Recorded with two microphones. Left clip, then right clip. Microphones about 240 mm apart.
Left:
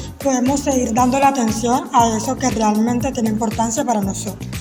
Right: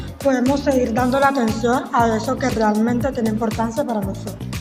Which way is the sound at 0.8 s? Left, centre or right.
Left.